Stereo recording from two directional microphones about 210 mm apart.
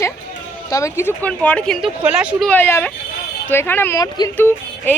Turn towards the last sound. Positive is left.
turn(degrees=10)  # may be behind; listen again after turning